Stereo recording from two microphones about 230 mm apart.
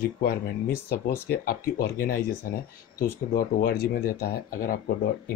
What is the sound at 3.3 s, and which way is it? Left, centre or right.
Speech, left.